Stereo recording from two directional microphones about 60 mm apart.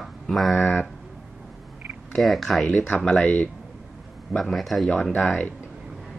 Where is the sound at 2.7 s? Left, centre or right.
Left.